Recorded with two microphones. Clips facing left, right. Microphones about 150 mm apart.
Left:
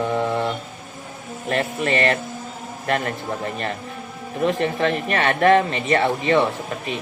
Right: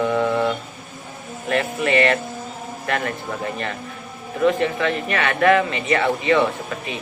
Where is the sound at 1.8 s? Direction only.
35° left (ahead or behind).